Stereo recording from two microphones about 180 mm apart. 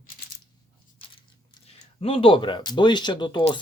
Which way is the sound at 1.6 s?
30° left (ahead or behind).